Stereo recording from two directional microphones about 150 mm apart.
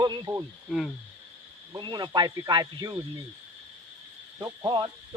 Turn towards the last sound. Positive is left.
turn(degrees=-25)  # may be behind; listen again after turning